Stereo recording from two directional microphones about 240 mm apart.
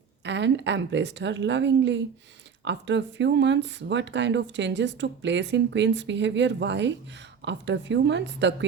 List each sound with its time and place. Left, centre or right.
0.3 s speech: right